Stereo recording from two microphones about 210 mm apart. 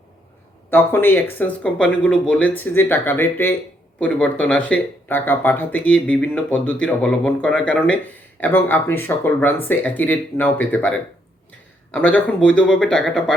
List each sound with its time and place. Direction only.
0.7 s speech: 10° left (ahead or behind)